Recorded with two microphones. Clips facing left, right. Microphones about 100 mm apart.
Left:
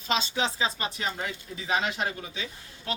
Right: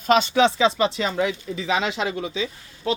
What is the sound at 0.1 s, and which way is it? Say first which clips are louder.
Speech: right 11 dB; 60° right (ahead or behind).